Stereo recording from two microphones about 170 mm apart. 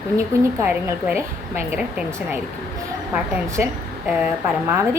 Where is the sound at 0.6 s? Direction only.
15° right (ahead or behind).